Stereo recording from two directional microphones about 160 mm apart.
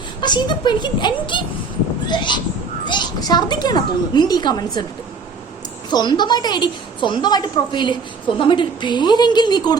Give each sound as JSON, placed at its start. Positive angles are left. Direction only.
{"t": 0.2, "sound": "a woman's voice", "side_deg": 30}
{"t": 5.9, "sound": "a woman's voice", "side_deg": 25}